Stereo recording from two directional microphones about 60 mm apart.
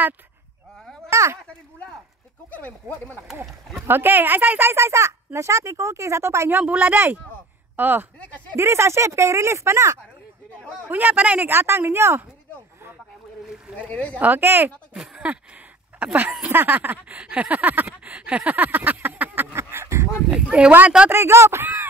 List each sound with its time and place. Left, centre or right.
1.1 s speech: right
2.8 s a sound: right
3.8 s speech: right
6.8 s speech: right
8.2 s speech: left
8.5 s speech: right
10.9 s a sound: right
11.5 s speech: right
13.7 s speech: centre
14.1 s speech: right
16.0 s a sound: right
19.5 s a sound: right
20.2 s speech: centre
21.1 s speech: right